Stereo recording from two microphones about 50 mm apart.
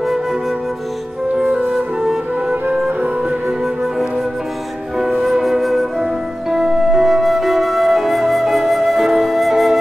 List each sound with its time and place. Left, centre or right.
1.3 s music: centre
5.3 s flute: centre